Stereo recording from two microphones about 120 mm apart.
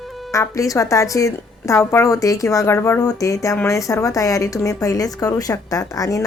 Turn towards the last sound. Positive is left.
turn(degrees=30)  # may be behind; listen again after turning